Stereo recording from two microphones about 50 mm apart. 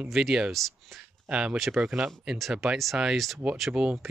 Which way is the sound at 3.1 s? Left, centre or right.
Centre.